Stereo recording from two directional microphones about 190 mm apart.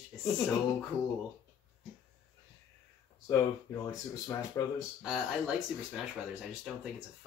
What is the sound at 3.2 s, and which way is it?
Speech, 15° left (ahead or behind).